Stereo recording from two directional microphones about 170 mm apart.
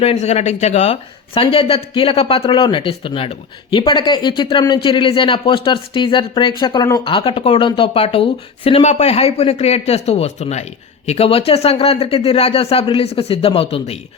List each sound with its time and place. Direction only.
0.0 s speech: 40° left (ahead or behind)